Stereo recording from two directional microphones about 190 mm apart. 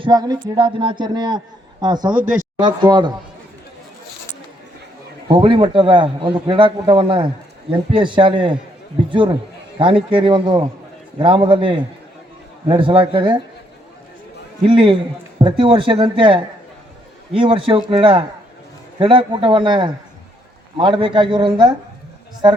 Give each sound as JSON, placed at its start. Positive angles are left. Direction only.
{"t": 0.0, "sound": "a man's voice", "side_deg": -20}
{"t": 5.3, "sound": "a man's voice", "side_deg": -25}
{"t": 14.6, "sound": "a man's voice", "side_deg": -25}